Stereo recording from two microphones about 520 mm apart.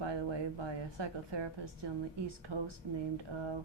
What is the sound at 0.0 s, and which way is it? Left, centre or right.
A woman's voice, right.